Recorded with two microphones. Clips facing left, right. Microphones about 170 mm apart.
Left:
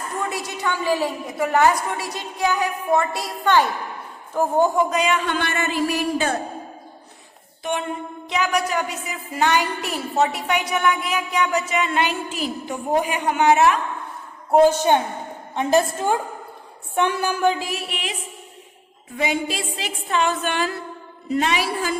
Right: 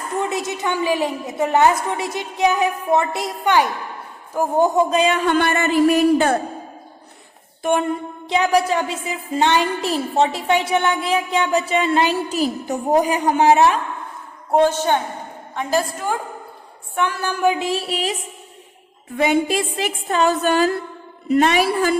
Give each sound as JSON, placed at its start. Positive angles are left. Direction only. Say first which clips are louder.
{"t": 0.2, "sound": "a woman's voice", "louder": "right 5 dB", "side_deg": -20}
{"t": 4.9, "sound": "a woman's voice", "louder": "right 4 dB", "side_deg": -30}
{"t": 7.6, "sound": "a sound", "louder": "right 7 dB", "side_deg": -45}
{"t": 8.3, "sound": "a woman's voice", "louder": "right 5 dB", "side_deg": -30}
{"t": 14.5, "sound": "a woman's voice", "louder": "left 1 dB", "side_deg": 10}
{"t": 15.5, "sound": "a woman's voice", "louder": "left 3 dB", "side_deg": 25}
{"t": 17.6, "sound": "music", "louder": "right 6 dB", "side_deg": -30}
{"t": 19.1, "sound": "a woman's voice", "louder": "right 6 dB", "side_deg": -55}
{"t": 21.2, "sound": "a woman's voice", "louder": "right 6 dB", "side_deg": -55}